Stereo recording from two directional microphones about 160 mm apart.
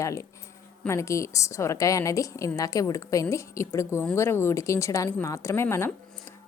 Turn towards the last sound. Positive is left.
turn(degrees=15)  # may be behind; listen again after turning